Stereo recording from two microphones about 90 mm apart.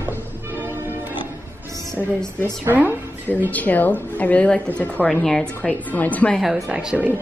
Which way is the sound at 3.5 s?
20° left (ahead or behind).